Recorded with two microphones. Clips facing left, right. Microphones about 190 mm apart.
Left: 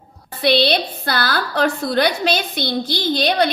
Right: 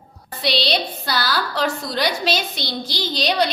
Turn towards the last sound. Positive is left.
turn(degrees=55)  # may be behind; listen again after turning